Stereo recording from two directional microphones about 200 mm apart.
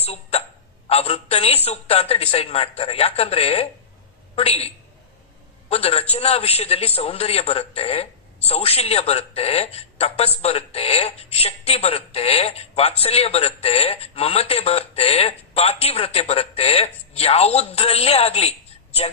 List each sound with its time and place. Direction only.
0.0 s a woman's voice: 30° left (ahead or behind)